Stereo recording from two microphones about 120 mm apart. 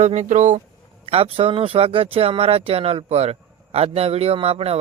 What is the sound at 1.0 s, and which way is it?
Speech, 55° right (ahead or behind).